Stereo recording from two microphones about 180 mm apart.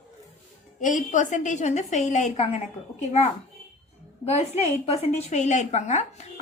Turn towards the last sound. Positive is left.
turn(degrees=40)  # may be behind; listen again after turning